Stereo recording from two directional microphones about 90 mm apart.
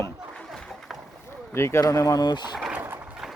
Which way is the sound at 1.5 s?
30° left (ahead or behind).